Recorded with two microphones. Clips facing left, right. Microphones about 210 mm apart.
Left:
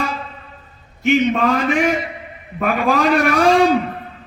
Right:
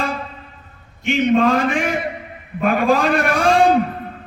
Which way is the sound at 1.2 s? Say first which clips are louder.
Right 2 dB; 55° right (ahead or behind).